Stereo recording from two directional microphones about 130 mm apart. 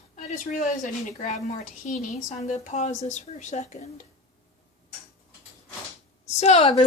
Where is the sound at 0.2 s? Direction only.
70° left (ahead or behind).